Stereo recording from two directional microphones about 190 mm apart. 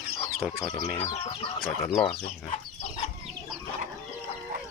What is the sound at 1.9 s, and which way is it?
Speech, 5° left (ahead or behind).